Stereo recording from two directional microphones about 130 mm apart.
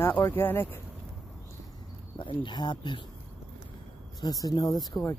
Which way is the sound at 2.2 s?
40° left (ahead or behind).